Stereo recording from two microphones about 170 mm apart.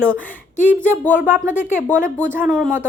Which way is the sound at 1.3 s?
50° left (ahead or behind).